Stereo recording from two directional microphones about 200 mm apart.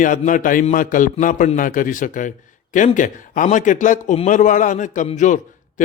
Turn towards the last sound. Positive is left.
turn(degrees=40)  # may be behind; listen again after turning